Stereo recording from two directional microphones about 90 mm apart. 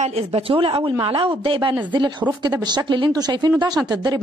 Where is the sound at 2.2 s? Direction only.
15° right (ahead or behind).